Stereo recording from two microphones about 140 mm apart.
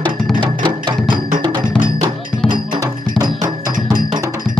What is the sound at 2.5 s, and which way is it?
Music, 30° right (ahead or behind).